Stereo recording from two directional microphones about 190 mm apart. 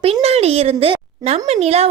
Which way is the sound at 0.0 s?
30° right (ahead or behind).